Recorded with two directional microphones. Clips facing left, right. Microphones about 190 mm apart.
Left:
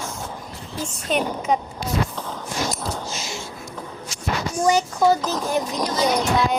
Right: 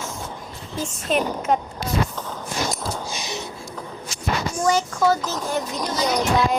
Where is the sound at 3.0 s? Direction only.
15° right (ahead or behind).